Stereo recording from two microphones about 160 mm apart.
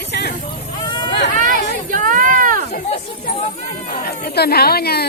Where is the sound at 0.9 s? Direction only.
30° left (ahead or behind).